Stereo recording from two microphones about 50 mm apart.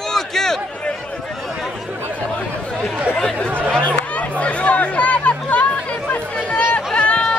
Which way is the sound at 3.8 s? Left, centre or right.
Left.